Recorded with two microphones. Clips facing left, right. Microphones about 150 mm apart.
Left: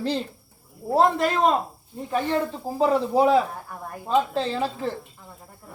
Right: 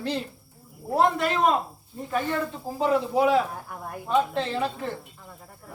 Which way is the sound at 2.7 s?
35° left (ahead or behind).